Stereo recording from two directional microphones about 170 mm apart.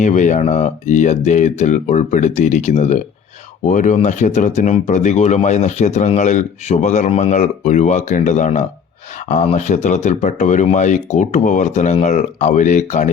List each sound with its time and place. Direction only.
0.0 s speech: 45° left (ahead or behind)